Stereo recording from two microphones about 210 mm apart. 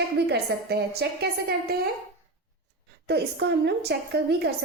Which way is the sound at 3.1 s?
55° right (ahead or behind).